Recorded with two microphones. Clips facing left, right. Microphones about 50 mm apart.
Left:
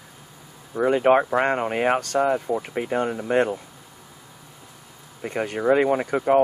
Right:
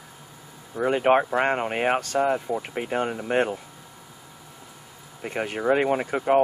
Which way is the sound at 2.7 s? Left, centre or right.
Centre.